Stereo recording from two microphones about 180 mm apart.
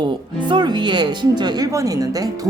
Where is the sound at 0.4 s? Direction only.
25° right (ahead or behind).